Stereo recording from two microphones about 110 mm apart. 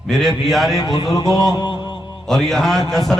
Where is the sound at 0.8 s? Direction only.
40° left (ahead or behind).